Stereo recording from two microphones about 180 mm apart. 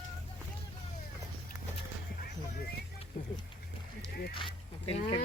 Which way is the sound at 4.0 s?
60° left (ahead or behind).